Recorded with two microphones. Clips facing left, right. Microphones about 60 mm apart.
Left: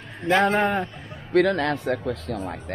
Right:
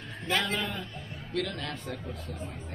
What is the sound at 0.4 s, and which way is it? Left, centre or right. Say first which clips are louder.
Speech: left 12 dB; left.